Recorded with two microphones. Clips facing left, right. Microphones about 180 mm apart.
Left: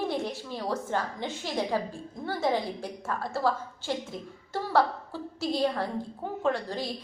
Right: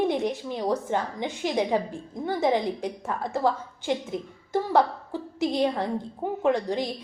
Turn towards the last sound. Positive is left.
turn(degrees=-20)  # may be behind; listen again after turning